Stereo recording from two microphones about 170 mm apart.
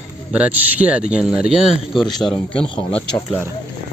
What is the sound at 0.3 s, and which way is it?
A man's voice, 10° right (ahead or behind).